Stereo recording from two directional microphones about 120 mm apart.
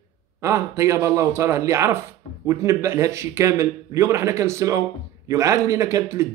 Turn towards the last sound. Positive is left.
turn(degrees=-25)  # may be behind; listen again after turning